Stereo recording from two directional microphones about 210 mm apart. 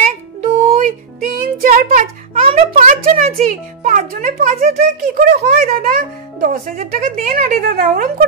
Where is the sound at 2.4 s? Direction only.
30° right (ahead or behind).